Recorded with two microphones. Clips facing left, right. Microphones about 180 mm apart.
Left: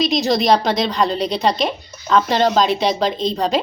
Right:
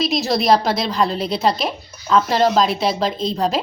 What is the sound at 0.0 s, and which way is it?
A woman's voice, 5° right (ahead or behind).